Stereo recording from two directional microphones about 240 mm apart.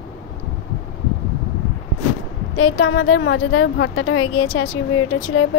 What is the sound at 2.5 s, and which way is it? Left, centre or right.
A woman's voice, left.